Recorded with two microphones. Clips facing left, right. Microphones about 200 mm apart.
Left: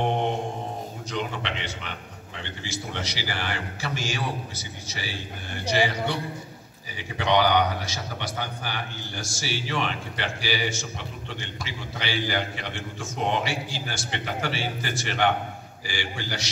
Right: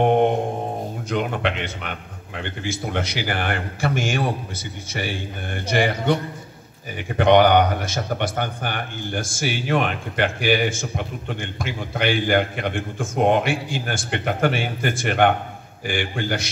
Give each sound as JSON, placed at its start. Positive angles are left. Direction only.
{"t": 0.0, "sound": "mantra", "side_deg": -55}
{"t": 1.1, "sound": "a man's voice", "side_deg": -55}